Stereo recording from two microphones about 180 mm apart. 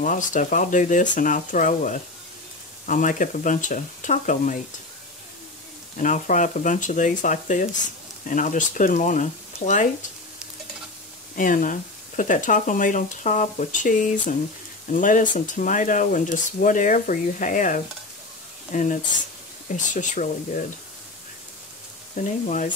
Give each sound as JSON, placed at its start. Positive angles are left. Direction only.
{"t": 0.0, "sound": "speech", "side_deg": 45}
{"t": 5.9, "sound": "speech", "side_deg": 45}
{"t": 11.3, "sound": "speech", "side_deg": 45}
{"t": 22.1, "sound": "speech", "side_deg": 45}